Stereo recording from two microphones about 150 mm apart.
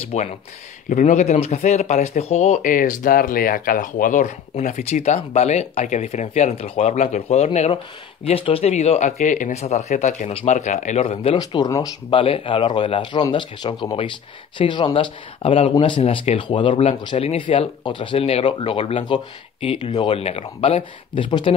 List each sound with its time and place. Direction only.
0.1 s speech: 50° left (ahead or behind)
11.3 s speech: 25° left (ahead or behind)